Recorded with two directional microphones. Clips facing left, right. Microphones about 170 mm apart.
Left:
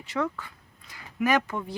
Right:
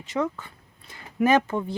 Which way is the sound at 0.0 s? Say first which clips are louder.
Right 2 dB; 20° right (ahead or behind).